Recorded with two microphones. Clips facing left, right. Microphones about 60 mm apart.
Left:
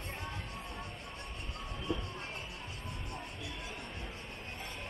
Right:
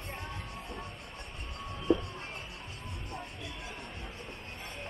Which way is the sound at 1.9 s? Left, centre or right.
Right.